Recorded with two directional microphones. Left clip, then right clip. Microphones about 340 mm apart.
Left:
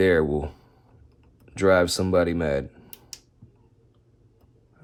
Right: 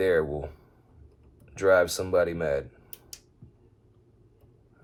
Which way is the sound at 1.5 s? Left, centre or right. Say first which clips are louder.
Left 2 dB; left.